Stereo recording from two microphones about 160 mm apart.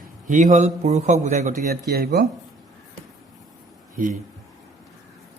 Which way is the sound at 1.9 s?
75° right (ahead or behind).